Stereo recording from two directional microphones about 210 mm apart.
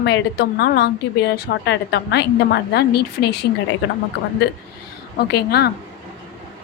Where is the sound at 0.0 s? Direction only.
50° left (ahead or behind).